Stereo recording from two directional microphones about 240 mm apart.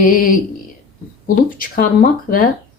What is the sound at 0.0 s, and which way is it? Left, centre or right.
Speech, left.